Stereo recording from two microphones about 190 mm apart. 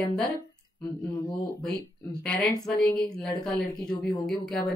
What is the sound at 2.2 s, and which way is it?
Speech, 5° left (ahead or behind).